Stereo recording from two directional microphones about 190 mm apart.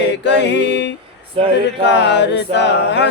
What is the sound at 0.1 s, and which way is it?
Music, 65° left (ahead or behind).